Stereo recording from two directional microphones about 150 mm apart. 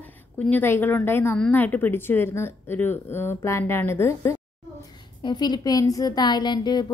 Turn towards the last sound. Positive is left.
turn(degrees=30)  # may be behind; listen again after turning